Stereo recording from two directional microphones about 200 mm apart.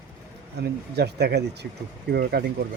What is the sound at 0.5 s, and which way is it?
Speech, 55° right (ahead or behind).